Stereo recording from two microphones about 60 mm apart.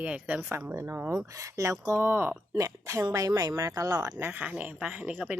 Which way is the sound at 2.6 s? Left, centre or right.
Right.